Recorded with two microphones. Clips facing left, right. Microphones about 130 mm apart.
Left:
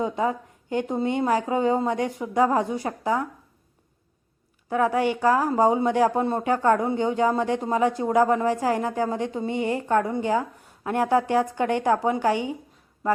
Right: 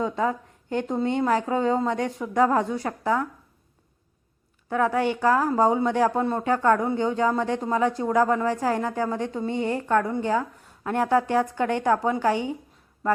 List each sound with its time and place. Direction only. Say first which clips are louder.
0.0 s speech: even; 20° left (ahead or behind)
4.7 s speech: left 1 dB; 15° left (ahead or behind)